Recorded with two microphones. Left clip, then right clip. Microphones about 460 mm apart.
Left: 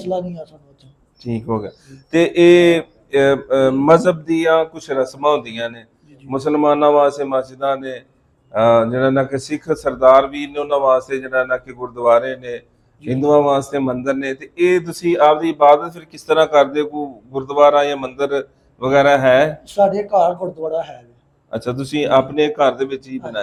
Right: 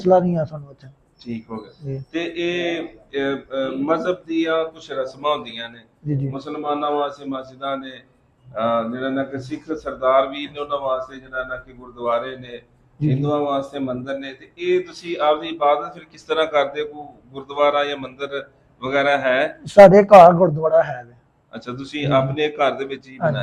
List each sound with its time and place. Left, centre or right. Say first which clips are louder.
1.2 s speech: left 10 dB; left
6.3 s speech: left 12 dB; left
20.0 s a man's voice: right 8 dB; right
21.5 s speech: left 8 dB; left